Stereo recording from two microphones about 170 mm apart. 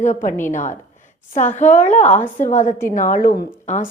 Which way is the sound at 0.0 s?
45° left (ahead or behind).